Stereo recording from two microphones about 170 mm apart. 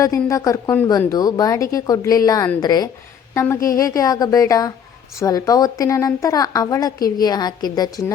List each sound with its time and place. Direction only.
0.3 s a woman's voice: 20° left (ahead or behind)